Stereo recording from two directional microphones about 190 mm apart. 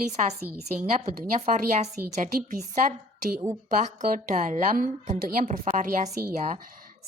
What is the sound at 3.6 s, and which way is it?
A woman's voice, 45° right (ahead or behind).